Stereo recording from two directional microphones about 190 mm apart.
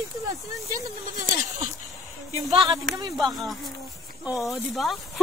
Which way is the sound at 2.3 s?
30° right (ahead or behind).